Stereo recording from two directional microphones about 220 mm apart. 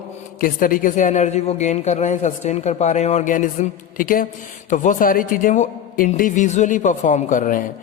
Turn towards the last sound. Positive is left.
turn(degrees=35)  # may be behind; listen again after turning